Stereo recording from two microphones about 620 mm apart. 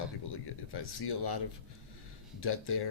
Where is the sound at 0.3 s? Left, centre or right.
Left.